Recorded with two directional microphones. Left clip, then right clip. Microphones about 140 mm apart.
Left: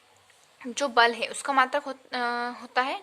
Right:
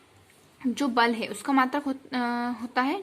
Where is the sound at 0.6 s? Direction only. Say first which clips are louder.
Left 2 dB; 20° left (ahead or behind).